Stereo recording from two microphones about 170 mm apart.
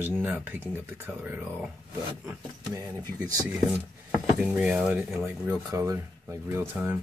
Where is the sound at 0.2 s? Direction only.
10° right (ahead or behind).